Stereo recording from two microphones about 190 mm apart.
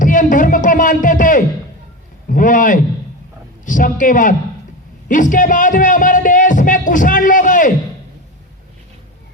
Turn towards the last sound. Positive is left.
turn(degrees=45)  # may be behind; listen again after turning